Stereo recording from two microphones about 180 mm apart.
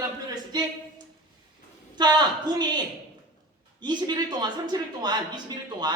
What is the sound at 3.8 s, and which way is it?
A man's voice, 25° right (ahead or behind).